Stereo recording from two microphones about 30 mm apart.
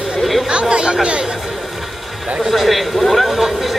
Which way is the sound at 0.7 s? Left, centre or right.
Right.